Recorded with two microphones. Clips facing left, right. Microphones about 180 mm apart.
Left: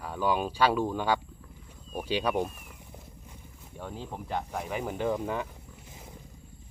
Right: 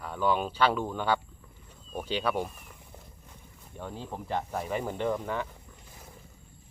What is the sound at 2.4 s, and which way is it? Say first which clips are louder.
Speech: left 3 dB; 5° left (ahead or behind).